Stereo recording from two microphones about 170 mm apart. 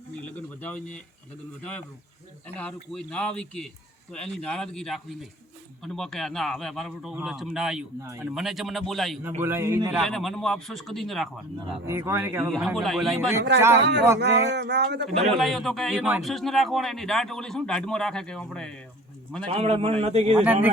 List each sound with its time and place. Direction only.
0.3 s speech: 10° left (ahead or behind)
2.6 s a man's voice: 5° left (ahead or behind)
9.4 s a man's voice: 15° right (ahead or behind)
10.0 s a man's voice: centre (ahead or behind)
11.9 s a man's voice: 15° right (ahead or behind)
12.5 s a man's voice: centre (ahead or behind)
13.7 s speech: 85° right
15.1 s a man's voice: 40° right (ahead or behind)
15.4 s a man's voice: centre (ahead or behind)
19.5 s a man's voice: 35° right (ahead or behind)
20.4 s a man's voice: 10° right (ahead or behind)